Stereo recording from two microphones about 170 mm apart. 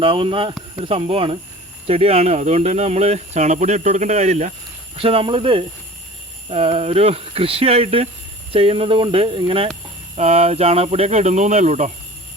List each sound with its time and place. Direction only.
0.0 s a man's voice: 30° right (ahead or behind)